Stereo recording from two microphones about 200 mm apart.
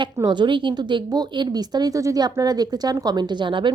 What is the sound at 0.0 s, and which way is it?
A woman's voice, 20° right (ahead or behind).